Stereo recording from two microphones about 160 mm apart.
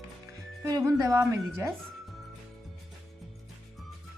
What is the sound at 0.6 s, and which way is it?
Speech, 20° right (ahead or behind).